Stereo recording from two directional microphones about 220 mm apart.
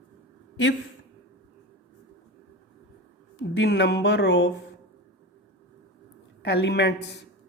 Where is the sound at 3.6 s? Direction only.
50° left (ahead or behind).